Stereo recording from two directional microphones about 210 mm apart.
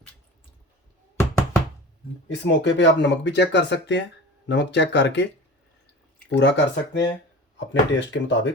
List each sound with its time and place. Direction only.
1.1 s knock: 15° left (ahead or behind)
2.4 s speech: 60° left (ahead or behind)
6.3 s speech: 55° left (ahead or behind)